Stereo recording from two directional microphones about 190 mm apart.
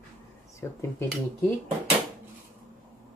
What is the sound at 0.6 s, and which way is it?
Speech, 15° left (ahead or behind).